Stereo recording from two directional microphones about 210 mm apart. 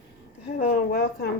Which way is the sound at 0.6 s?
40° left (ahead or behind).